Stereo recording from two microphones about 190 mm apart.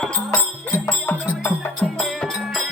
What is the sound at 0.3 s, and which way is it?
Music, 10° left (ahead or behind).